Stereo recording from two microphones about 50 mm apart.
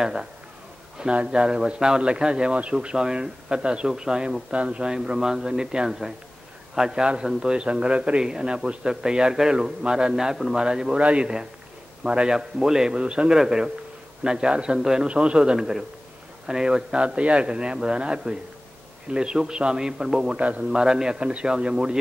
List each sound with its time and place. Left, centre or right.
0.0 s speech: centre
5.9 s speech: centre
11.0 s a man's voice: right
12.0 s a man's voice: centre
20.3 s a man's voice: right
20.8 s a man's voice: centre